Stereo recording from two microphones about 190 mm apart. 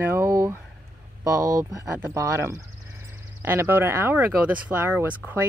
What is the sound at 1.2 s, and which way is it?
Speech, 20° right (ahead or behind).